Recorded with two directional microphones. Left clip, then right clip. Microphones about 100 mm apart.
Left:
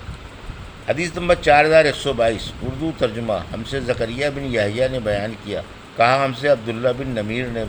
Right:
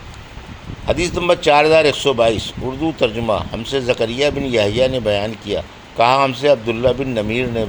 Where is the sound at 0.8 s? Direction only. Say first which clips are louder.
Right 3 dB; 60° right (ahead or behind).